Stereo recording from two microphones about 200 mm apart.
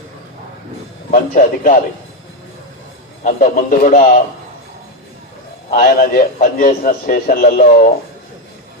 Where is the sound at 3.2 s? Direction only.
40° left (ahead or behind).